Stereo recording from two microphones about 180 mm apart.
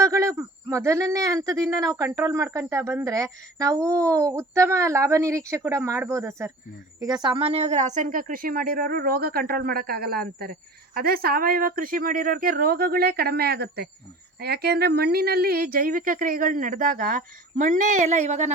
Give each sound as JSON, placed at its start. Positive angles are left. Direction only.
{"t": 0.0, "sound": "a woman's voice", "side_deg": -15}